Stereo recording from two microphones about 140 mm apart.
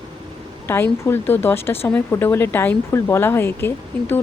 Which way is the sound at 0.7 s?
15° left (ahead or behind).